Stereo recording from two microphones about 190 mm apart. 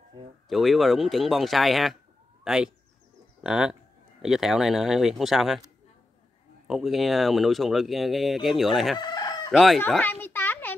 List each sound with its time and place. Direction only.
0.2 s speech: 25° right (ahead or behind)
0.5 s speech: centre (ahead or behind)
6.7 s speech: centre (ahead or behind)
9.0 s chicken: 20° left (ahead or behind)
9.5 s speech: centre (ahead or behind)
10.2 s a sound: 10° left (ahead or behind)